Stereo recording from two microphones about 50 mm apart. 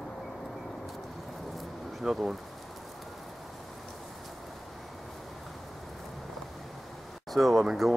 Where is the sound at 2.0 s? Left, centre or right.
Centre.